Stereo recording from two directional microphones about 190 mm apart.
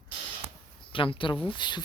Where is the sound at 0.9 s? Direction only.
25° left (ahead or behind).